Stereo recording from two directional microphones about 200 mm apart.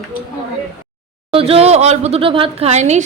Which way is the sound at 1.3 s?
30° right (ahead or behind).